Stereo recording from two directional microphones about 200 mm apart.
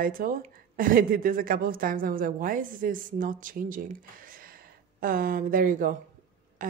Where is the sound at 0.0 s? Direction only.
45° right (ahead or behind).